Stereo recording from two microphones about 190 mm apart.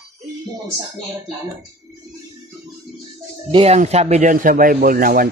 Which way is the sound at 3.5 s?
30° right (ahead or behind).